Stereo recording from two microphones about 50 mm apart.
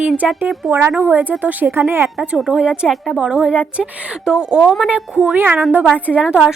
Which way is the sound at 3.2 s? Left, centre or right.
Centre.